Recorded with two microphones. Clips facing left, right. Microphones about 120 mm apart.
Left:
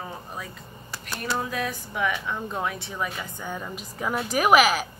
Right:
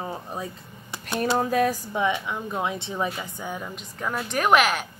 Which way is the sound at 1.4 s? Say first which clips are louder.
Right 7 dB; 45° right (ahead or behind).